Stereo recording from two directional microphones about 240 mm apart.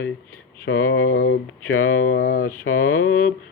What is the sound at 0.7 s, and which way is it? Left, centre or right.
Speech, left.